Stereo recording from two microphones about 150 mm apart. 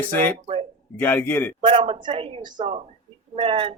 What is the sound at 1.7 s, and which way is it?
Speech, 35° right (ahead or behind).